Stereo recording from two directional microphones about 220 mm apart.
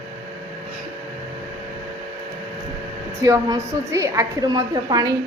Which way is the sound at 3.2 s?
15° right (ahead or behind).